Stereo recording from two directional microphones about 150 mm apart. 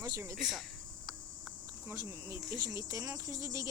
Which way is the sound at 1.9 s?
25° right (ahead or behind).